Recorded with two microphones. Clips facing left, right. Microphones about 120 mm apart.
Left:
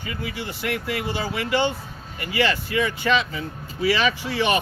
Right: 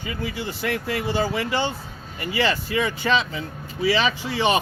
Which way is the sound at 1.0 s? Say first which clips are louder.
Right 3 dB; 30° right (ahead or behind).